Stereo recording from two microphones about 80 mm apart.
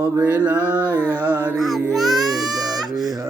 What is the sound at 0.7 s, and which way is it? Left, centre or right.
Carnatic music, centre.